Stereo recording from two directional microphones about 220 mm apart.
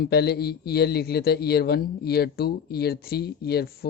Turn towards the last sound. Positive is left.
turn(degrees=45)  # may be behind; listen again after turning